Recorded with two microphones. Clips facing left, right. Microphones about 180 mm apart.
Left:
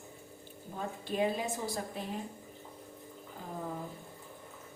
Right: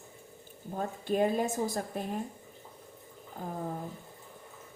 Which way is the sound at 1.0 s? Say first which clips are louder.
Right 4 dB; 50° right (ahead or behind).